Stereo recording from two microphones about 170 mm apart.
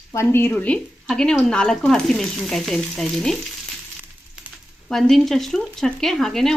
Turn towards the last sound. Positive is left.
turn(degrees=0)  # may be behind; listen again after turning